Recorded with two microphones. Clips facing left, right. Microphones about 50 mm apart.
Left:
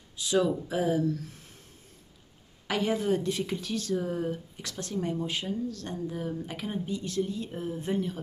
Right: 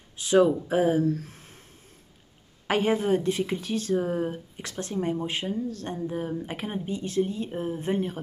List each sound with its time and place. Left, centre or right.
0.1 s speech: right
2.6 s a woman's voice: right
3.9 s speech: right